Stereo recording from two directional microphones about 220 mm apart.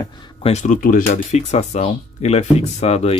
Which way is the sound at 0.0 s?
25° left (ahead or behind).